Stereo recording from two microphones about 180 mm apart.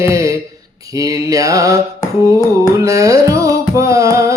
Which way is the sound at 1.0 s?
20° right (ahead or behind).